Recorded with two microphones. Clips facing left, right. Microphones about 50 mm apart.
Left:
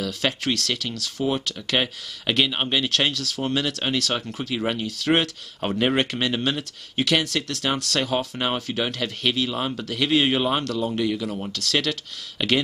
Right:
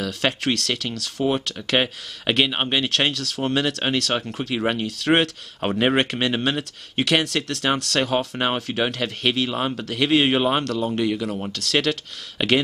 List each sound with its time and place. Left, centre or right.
0.0 s speech: centre
1.8 s speech: centre
10.6 s speech: centre